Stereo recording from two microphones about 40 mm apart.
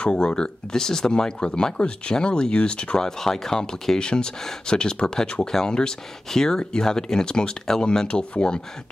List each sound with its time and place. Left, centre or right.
0.0 s speech: left
0.7 s speech: centre
1.4 s speech: left
3.0 s speech: centre
8.1 s speech: left